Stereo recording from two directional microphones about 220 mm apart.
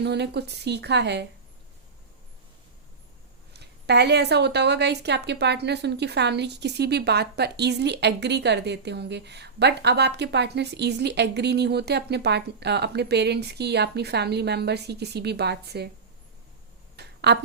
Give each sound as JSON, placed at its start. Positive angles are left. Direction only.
{"t": 0.0, "sound": "a woman's voice", "side_deg": -50}
{"t": 3.5, "sound": "a woman's voice", "side_deg": -50}
{"t": 17.0, "sound": "a sound", "side_deg": -50}